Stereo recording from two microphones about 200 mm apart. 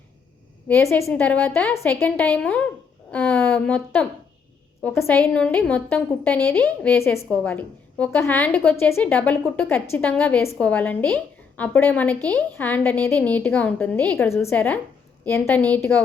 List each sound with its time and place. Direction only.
0.7 s a woman's voice: 15° left (ahead or behind)